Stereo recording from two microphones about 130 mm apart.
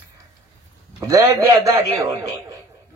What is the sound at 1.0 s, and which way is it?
A man's voice, 25° right (ahead or behind).